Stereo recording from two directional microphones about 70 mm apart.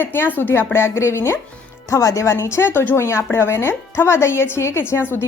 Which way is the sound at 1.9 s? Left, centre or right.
Left.